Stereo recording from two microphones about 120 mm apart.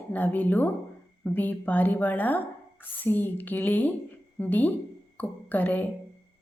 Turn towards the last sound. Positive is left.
turn(degrees=15)  # may be behind; listen again after turning